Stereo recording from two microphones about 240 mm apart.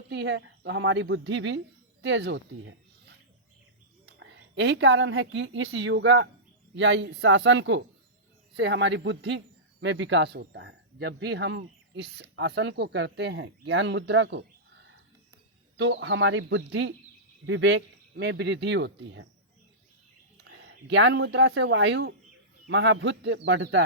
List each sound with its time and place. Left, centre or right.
0.1 s a woman's voice: right
15.8 s speech: right
20.4 s speech: right